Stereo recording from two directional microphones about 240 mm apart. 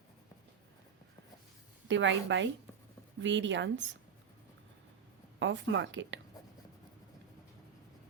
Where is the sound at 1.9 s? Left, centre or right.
Right.